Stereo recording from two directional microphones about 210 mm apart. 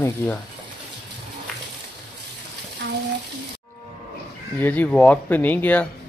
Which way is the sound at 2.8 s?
55° right (ahead or behind).